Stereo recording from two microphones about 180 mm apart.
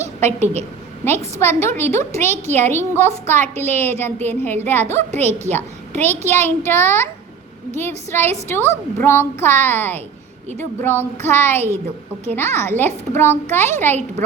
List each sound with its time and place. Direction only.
0.0 s a sound: 40° right (ahead or behind)
1.0 s a woman's voice: 10° left (ahead or behind)
6.2 s a child's voice: 40° right (ahead or behind)
6.7 s a woman's voice: 15° left (ahead or behind)